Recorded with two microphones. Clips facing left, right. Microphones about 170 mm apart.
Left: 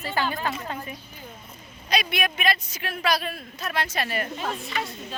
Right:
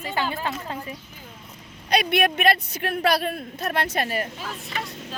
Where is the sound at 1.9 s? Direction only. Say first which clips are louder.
Right 5 dB; 60° right (ahead or behind).